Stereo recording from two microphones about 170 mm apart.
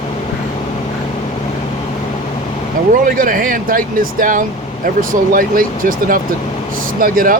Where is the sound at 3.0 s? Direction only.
55° right (ahead or behind).